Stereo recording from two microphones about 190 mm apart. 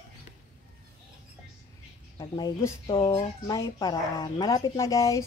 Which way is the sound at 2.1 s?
25° left (ahead or behind).